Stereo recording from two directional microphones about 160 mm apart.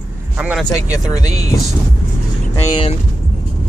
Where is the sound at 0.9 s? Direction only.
20° left (ahead or behind).